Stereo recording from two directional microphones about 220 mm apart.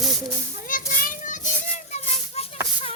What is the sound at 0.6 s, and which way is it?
Children playing, 40° left (ahead or behind).